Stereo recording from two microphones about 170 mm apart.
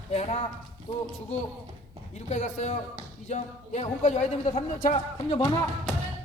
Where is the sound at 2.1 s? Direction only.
45° left (ahead or behind).